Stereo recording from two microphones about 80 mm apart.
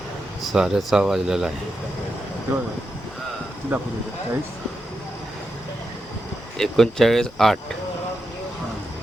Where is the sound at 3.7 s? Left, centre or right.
Right.